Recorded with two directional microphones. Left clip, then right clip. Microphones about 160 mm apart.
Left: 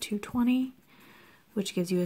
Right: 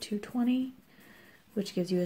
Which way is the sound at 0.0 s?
40° left (ahead or behind).